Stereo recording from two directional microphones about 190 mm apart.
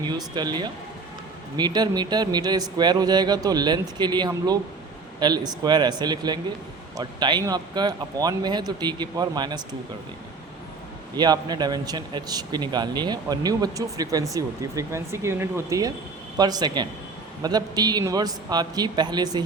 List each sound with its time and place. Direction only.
0.0 s a man's voice: 20° right (ahead or behind)
11.2 s a man's voice: 20° right (ahead or behind)